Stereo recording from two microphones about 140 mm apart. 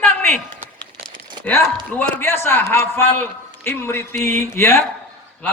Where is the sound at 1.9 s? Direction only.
15° left (ahead or behind).